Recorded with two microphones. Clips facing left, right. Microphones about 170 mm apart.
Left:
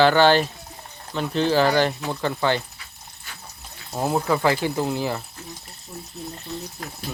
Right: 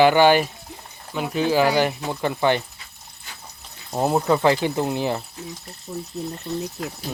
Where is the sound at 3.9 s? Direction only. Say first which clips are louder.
Right 3 dB; 15° right (ahead or behind).